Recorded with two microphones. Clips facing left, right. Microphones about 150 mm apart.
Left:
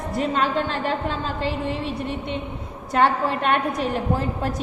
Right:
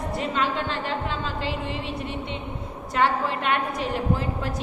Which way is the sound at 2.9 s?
40° left (ahead or behind).